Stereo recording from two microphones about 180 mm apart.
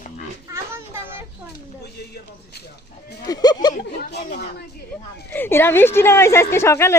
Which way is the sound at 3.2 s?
20° left (ahead or behind).